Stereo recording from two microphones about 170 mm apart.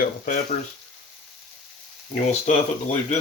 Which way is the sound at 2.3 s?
45° left (ahead or behind).